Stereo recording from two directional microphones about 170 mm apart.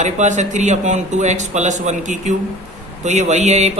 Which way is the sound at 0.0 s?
45° right (ahead or behind).